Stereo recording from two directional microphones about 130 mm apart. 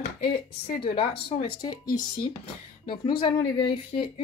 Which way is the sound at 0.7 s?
45° left (ahead or behind).